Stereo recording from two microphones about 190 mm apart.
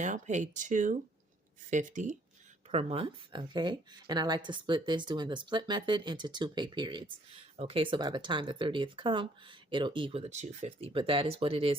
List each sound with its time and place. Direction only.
0.0 s speech: 40° right (ahead or behind)
2.7 s speech: 30° right (ahead or behind)